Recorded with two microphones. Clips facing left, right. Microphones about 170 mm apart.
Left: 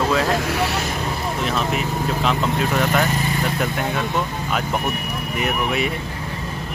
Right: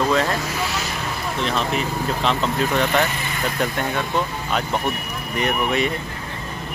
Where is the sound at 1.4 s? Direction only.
5° left (ahead or behind).